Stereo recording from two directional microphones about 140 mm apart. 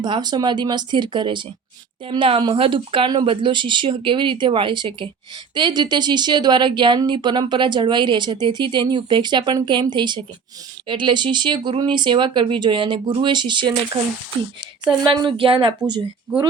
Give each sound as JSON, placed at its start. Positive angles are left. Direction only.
{"t": 0.0, "sound": "speech", "side_deg": -30}